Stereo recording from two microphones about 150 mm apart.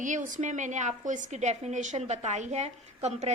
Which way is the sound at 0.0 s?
60° right (ahead or behind).